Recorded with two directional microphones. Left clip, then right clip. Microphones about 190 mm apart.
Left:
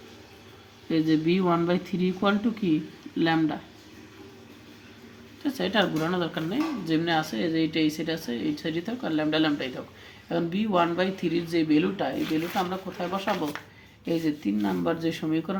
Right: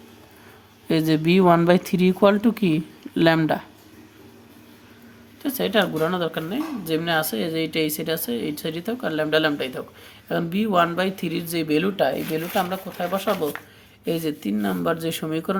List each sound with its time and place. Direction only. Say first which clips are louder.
0.9 s speech: right 4 dB; 65° right (ahead or behind)
5.4 s speech: right 4 dB; 35° right (ahead or behind)